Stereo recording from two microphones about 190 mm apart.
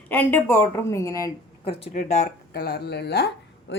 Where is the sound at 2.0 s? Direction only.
40° left (ahead or behind).